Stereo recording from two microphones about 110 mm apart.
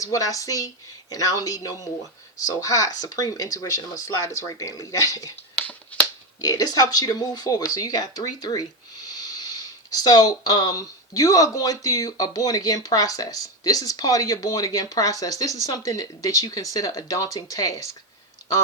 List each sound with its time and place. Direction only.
0.0 s speech: 30° left (ahead or behind)
5.5 s finger snapping: 10° left (ahead or behind)
6.4 s speech: 35° left (ahead or behind)